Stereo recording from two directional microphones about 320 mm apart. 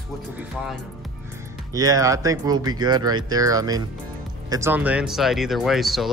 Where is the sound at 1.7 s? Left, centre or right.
Centre.